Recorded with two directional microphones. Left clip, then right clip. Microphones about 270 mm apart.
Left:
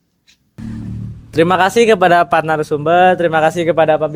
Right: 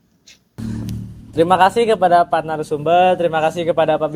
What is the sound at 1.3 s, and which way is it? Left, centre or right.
A man's voice, left.